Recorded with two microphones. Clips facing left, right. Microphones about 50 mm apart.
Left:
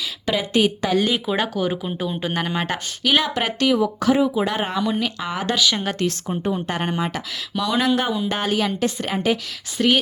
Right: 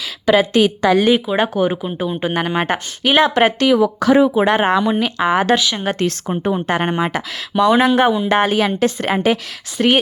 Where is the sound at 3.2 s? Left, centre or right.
Right.